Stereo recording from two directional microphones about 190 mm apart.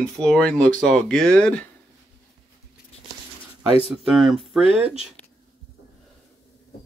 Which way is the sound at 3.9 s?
Centre (ahead or behind).